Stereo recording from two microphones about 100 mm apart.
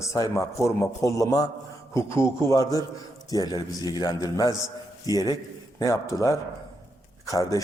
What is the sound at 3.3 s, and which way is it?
A man's voice, 40° left (ahead or behind).